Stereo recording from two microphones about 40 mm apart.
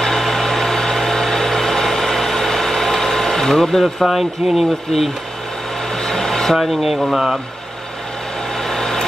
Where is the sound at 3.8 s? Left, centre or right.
Centre.